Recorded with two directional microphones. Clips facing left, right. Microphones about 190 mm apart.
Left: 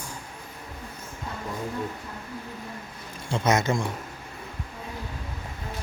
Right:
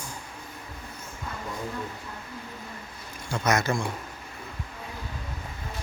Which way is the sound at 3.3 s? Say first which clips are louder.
Left 2 dB; 25° left (ahead or behind).